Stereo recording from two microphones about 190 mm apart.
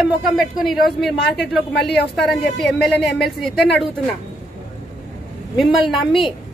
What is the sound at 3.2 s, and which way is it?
Speech, centre (ahead or behind).